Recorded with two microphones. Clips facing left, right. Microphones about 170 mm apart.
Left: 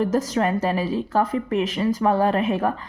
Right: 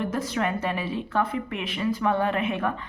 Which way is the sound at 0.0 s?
40° left (ahead or behind).